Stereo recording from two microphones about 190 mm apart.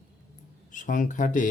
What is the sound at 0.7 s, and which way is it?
Speech, 40° left (ahead or behind).